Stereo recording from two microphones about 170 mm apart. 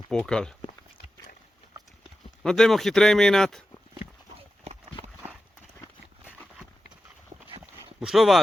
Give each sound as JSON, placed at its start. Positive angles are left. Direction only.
{"t": 0.1, "sound": "a man's voice", "side_deg": 5}
{"t": 2.4, "sound": "a man's voice", "side_deg": 5}
{"t": 4.4, "sound": "clip-clop", "side_deg": -40}
{"t": 7.9, "sound": "speech", "side_deg": 0}